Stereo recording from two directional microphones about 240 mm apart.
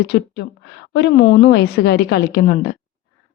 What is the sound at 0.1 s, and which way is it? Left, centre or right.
A woman's voice, left.